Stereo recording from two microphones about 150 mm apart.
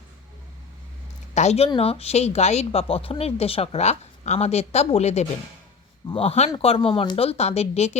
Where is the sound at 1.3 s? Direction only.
50° left (ahead or behind).